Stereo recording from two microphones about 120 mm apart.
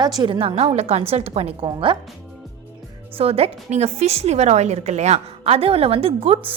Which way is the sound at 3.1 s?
55° right (ahead or behind).